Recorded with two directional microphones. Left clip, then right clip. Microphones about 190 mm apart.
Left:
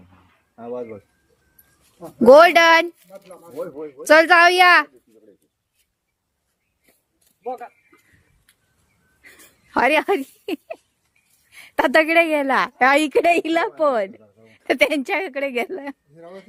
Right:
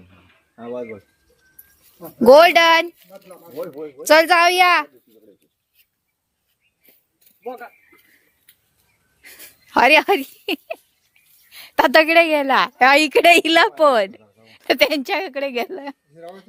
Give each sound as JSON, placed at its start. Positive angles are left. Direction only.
{"t": 2.2, "sound": "speech", "side_deg": 20}
{"t": 3.2, "sound": "speech", "side_deg": -20}
{"t": 3.5, "sound": "speech", "side_deg": 0}
{"t": 7.4, "sound": "a sound", "side_deg": -25}
{"t": 9.7, "sound": "a woman's voice", "side_deg": 0}
{"t": 16.2, "sound": "speech", "side_deg": 40}